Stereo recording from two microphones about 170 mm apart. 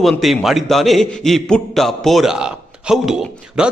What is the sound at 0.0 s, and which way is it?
A man's voice, centre (ahead or behind).